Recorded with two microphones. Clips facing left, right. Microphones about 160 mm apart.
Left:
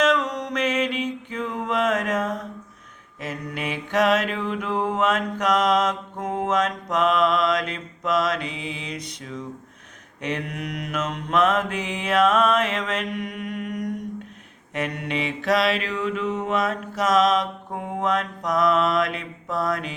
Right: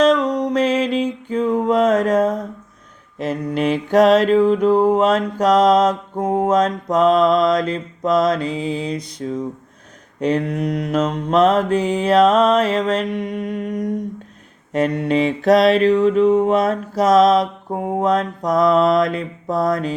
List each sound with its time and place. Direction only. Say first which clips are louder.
0.0 s music: right 7 dB; 30° right (ahead or behind)
3.2 s mantra: right 10 dB; 35° right (ahead or behind)